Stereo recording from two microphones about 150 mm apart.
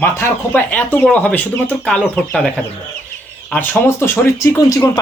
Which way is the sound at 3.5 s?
15° left (ahead or behind).